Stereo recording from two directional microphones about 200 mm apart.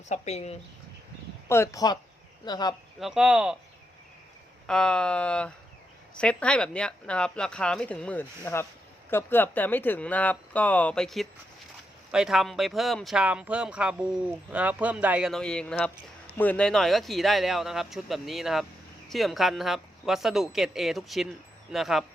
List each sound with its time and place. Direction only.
0.1 s speech: 35° left (ahead or behind)
1.5 s speech: 15° left (ahead or behind)
3.0 s speech: 5° right (ahead or behind)
4.6 s speech: 5° left (ahead or behind)